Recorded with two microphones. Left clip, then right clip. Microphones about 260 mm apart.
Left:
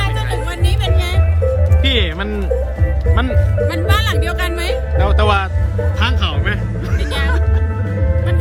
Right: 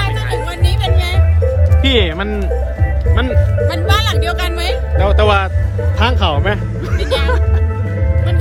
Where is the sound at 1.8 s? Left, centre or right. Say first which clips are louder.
Right 5 dB; centre.